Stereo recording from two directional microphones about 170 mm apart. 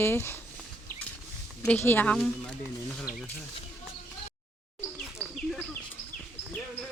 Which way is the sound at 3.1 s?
60° left (ahead or behind).